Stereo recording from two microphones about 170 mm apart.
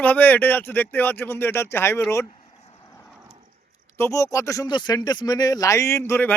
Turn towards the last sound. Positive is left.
turn(degrees=10)  # may be behind; listen again after turning